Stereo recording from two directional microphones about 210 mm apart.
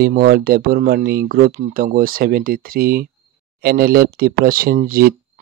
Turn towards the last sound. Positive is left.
turn(degrees=-45)  # may be behind; listen again after turning